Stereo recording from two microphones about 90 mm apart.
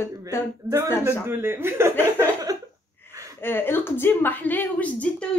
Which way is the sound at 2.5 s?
40° right (ahead or behind).